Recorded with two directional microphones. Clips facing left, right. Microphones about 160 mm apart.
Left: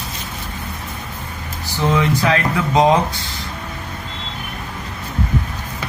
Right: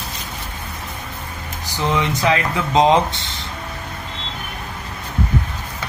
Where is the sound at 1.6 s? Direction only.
20° right (ahead or behind).